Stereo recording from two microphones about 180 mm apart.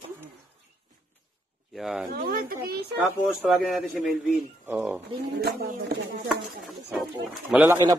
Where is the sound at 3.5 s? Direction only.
Centre (ahead or behind).